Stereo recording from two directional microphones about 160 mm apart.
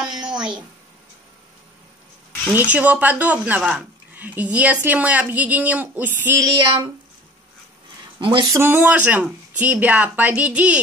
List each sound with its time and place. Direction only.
0.0 s a sound: 5° right (ahead or behind)
0.4 s speech: 5° right (ahead or behind)
2.5 s speech: 10° right (ahead or behind)
8.2 s speech: 30° right (ahead or behind)
8.5 s speech: 10° right (ahead or behind)